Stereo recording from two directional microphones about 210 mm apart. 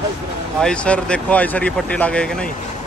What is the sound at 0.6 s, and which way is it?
Speech, 5° left (ahead or behind).